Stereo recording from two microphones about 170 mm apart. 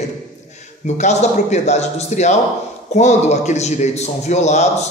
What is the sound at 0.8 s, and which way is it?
Speech, 40° left (ahead or behind).